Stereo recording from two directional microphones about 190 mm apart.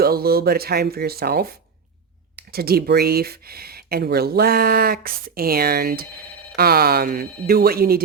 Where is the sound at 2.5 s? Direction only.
55° right (ahead or behind).